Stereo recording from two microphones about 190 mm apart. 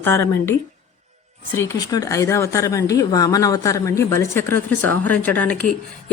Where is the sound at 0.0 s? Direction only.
10° left (ahead or behind).